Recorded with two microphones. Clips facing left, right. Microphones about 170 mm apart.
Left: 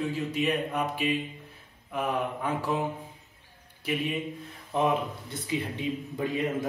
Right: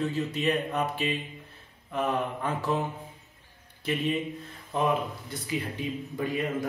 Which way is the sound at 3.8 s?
10° left (ahead or behind).